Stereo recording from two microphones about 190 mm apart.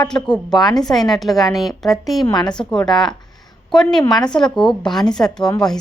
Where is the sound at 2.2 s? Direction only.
20° left (ahead or behind).